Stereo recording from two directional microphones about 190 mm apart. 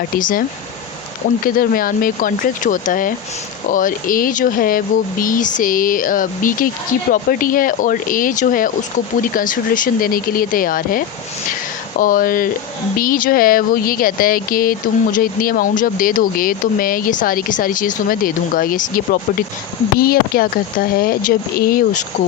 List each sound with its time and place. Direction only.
0.2 s speech: 45° left (ahead or behind)
1.5 s speech: 50° left (ahead or behind)